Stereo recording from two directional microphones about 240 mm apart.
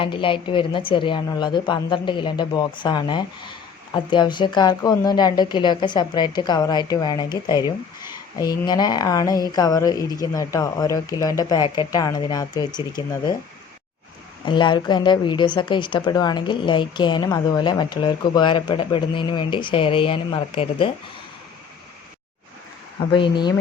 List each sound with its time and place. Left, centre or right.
0.0 s a woman's voice: left
14.4 s a woman's voice: centre
23.0 s a woman's voice: left